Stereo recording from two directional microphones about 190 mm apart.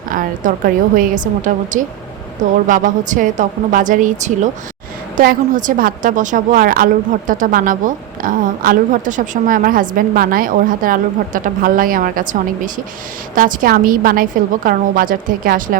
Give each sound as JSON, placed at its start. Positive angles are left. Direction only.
{"t": 0.1, "sound": "a woman's voice", "side_deg": -45}